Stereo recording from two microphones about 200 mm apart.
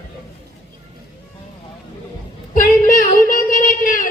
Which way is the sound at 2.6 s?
45° left (ahead or behind).